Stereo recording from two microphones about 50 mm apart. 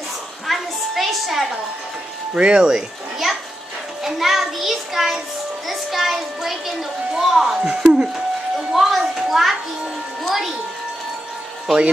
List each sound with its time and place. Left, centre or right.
0.5 s a sound: centre
2.3 s speech: centre
4.0 s a child's voice: centre
7.6 s speech: centre
8.7 s a sound: centre
11.6 s speech: centre